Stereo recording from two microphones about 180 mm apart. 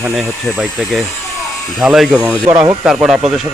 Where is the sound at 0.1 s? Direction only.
Centre (ahead or behind).